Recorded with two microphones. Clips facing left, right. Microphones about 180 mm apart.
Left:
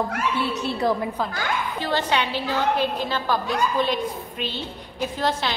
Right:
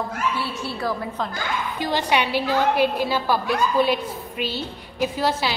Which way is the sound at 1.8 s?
15° right (ahead or behind).